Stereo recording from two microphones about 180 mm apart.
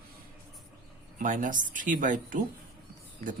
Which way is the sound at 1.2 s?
45° right (ahead or behind).